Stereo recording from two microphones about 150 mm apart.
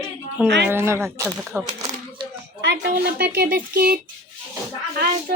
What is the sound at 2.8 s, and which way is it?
Speech, 90° right.